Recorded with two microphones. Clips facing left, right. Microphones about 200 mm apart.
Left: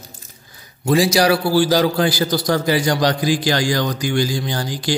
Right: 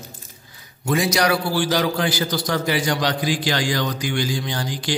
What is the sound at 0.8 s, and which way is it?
A man's voice, 30° left (ahead or behind).